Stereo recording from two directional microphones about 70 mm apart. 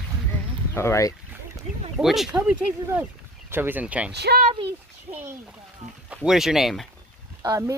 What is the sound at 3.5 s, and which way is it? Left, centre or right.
Speech, right.